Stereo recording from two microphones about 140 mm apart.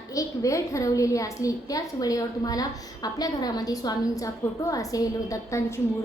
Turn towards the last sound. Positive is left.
turn(degrees=20)  # may be behind; listen again after turning